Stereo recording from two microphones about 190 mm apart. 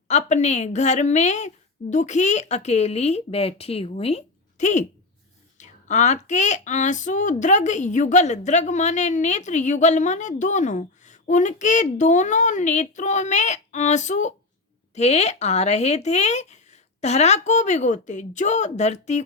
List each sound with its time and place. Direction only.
0.1 s speech: 40° left (ahead or behind)